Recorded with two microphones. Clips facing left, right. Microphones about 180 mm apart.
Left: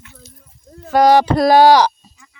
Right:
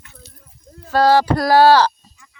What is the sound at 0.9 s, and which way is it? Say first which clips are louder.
Speech: left 3 dB; 15° left (ahead or behind).